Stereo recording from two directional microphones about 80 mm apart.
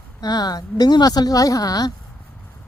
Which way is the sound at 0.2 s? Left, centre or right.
Left.